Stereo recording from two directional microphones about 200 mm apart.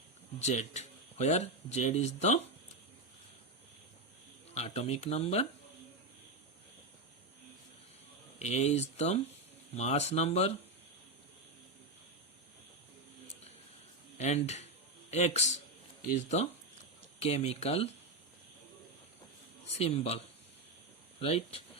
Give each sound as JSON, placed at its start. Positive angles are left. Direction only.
{"t": 0.3, "sound": "speech", "side_deg": 35}
{"t": 4.5, "sound": "speech", "side_deg": 30}
{"t": 8.4, "sound": "speech", "side_deg": 35}
{"t": 14.2, "sound": "speech", "side_deg": 35}
{"t": 17.2, "sound": "speech", "side_deg": 30}
{"t": 19.6, "sound": "speech", "side_deg": 30}